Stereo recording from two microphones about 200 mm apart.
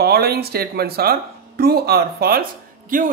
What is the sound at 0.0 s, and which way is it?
Speech, 50° right (ahead or behind).